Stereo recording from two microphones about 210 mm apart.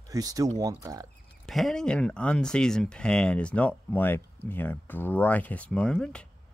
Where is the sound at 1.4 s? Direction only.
Centre (ahead or behind).